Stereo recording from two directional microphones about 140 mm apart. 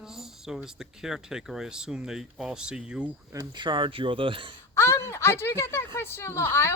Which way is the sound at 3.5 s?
35° right (ahead or behind).